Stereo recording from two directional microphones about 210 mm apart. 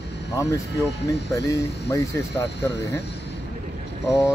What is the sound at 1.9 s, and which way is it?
Speech, 15° left (ahead or behind).